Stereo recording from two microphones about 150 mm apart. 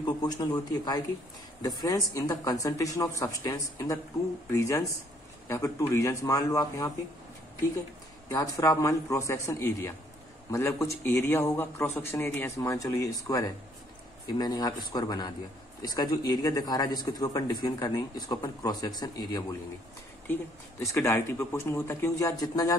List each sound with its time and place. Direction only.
0.0 s speech: 25° left (ahead or behind)
8.3 s speech: 25° left (ahead or behind)
20.9 s speech: 20° left (ahead or behind)